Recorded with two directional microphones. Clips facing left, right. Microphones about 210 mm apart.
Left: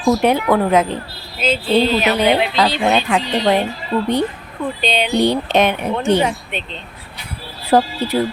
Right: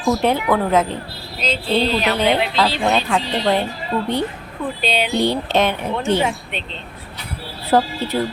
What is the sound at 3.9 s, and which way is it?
Speech, 35° left (ahead or behind).